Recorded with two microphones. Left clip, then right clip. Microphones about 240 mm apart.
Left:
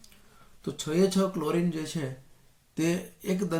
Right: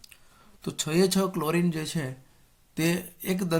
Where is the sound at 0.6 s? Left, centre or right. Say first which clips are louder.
Right 1 dB; right.